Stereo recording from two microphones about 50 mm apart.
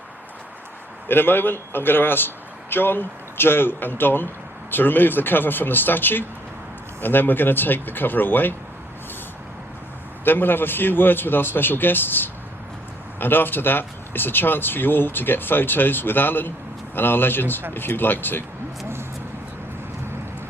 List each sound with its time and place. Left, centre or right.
1.0 s speech: left
10.2 s speech: left